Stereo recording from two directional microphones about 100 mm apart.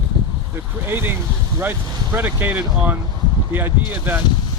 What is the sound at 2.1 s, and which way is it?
Speech, 20° right (ahead or behind).